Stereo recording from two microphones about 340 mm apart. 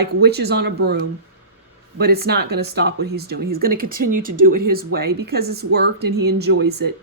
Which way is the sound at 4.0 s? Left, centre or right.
Right.